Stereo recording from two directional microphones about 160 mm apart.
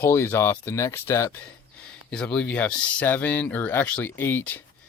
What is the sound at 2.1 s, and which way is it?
Speech, 5° left (ahead or behind).